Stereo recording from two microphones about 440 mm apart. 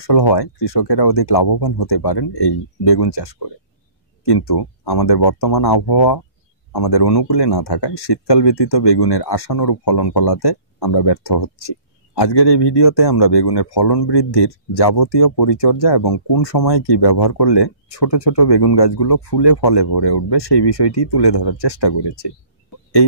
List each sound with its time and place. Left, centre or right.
0.0 s speech: left